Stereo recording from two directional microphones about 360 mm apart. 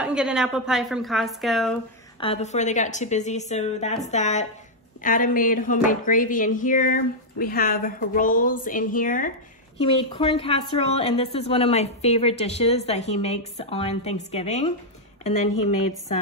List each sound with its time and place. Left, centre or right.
0.0 s a woman's voice: centre
2.1 s a woman's voice: centre
15.5 s a woman's voice: left